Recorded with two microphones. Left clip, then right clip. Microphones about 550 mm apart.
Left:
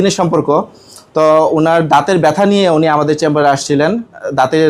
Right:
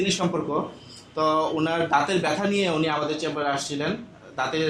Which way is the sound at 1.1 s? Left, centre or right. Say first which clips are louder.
Left 14 dB; left.